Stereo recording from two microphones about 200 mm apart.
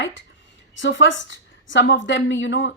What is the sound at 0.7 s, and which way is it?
A woman's voice, 70° left (ahead or behind).